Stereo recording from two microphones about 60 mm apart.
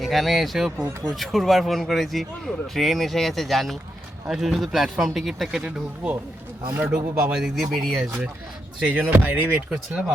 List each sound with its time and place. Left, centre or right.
0.0 s a man's voice: centre
8.9 s speech: right